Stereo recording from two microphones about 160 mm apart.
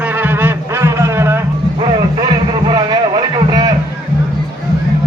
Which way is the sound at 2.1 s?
30° right (ahead or behind).